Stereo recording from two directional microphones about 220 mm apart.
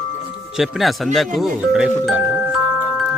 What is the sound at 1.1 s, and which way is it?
Speech, centre (ahead or behind).